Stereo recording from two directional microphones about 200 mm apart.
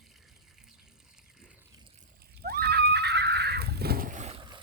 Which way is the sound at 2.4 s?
50° right (ahead or behind).